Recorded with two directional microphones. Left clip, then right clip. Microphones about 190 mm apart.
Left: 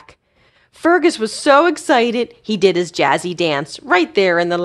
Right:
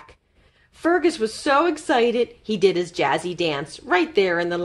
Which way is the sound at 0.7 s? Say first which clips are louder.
Left 6 dB; 40° left (ahead or behind).